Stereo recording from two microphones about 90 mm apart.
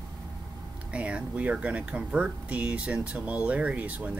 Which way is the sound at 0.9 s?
15° right (ahead or behind).